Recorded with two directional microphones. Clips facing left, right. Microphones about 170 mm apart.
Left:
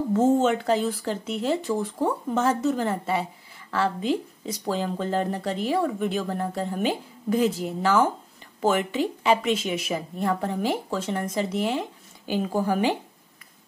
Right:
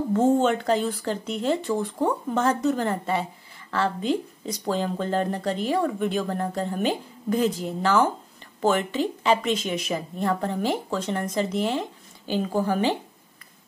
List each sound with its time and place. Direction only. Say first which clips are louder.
0.1 s speech: even; 5° left (ahead or behind)